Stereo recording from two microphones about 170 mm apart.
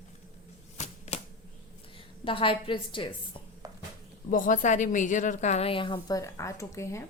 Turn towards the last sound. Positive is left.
turn(degrees=15)  # may be behind; listen again after turning